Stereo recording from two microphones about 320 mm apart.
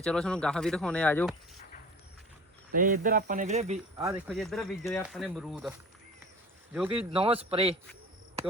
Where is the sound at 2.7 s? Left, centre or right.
Right.